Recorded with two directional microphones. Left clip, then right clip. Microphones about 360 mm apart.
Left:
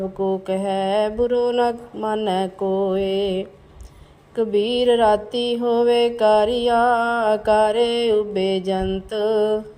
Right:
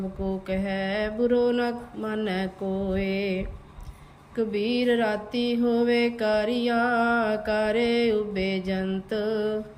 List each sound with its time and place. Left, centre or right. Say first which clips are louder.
0.4 s mantra: left 7 dB; centre
2.6 s mantra: left 10 dB; left
2.9 s mantra: left 7 dB; centre